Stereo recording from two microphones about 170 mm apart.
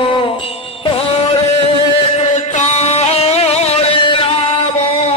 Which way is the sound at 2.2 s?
40° left (ahead or behind).